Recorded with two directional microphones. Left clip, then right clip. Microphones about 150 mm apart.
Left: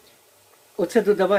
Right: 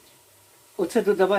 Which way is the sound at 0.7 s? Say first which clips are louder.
Left 3 dB; 25° left (ahead or behind).